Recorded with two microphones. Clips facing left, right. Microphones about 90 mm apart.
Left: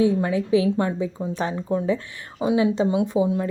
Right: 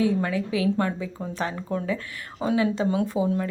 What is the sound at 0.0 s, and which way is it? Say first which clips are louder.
Speech: left 3 dB; 25° left (ahead or behind).